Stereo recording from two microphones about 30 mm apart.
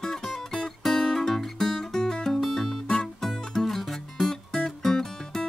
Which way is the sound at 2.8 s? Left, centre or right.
Centre.